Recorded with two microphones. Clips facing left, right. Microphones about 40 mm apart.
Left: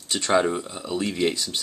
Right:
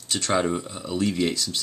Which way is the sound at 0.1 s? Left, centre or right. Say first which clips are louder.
Left 2 dB; centre.